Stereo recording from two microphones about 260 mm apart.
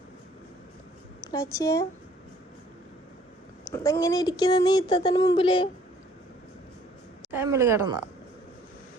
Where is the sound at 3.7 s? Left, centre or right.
Centre.